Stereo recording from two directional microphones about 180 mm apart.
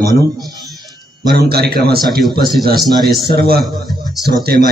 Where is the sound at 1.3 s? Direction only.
60° right (ahead or behind).